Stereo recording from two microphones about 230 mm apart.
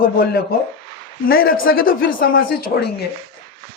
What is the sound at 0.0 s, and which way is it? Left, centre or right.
Speech, left.